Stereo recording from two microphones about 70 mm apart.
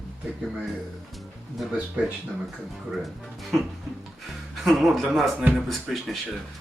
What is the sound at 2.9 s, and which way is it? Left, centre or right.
Speech, centre.